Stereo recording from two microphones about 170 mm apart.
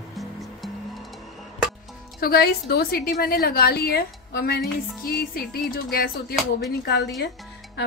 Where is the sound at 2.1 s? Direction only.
65° left (ahead or behind).